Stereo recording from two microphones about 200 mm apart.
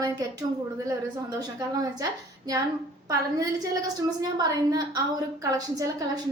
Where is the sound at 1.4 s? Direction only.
20° right (ahead or behind).